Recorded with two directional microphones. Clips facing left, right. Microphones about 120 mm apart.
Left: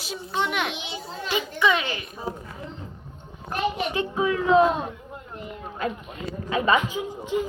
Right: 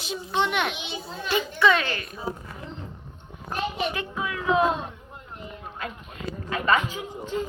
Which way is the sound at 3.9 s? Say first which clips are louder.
Left 7 dB; 30° left (ahead or behind).